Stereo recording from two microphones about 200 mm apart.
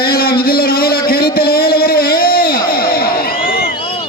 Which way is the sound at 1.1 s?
50° left (ahead or behind).